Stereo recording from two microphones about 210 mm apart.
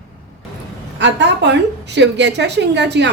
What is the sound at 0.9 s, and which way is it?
A woman's voice, 55° right (ahead or behind).